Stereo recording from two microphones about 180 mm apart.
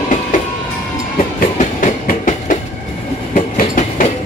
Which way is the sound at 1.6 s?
45° left (ahead or behind).